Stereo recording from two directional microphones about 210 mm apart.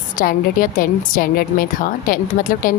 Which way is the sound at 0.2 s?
40° left (ahead or behind).